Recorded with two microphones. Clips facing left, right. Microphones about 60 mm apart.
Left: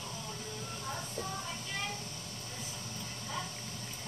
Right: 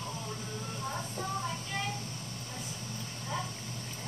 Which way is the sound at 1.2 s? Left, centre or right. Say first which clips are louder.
Right 3 dB; right.